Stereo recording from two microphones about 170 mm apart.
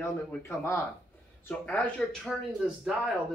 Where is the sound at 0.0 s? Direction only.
15° left (ahead or behind).